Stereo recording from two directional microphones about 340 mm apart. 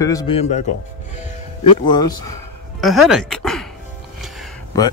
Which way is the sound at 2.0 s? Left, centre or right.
Left.